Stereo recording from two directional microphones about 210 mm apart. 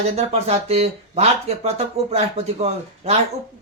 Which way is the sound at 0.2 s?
30° right (ahead or behind).